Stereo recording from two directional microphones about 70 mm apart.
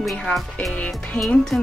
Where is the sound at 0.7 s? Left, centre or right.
Centre.